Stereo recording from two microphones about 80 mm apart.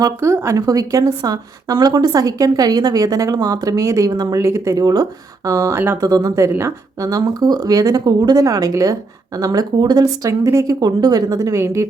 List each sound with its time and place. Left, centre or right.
0.2 s speech: right
1.2 s speech: right
4.1 s speech: right
4.4 s speech: right
10.2 s speech: right
10.8 s speech: right
11.3 s speech: right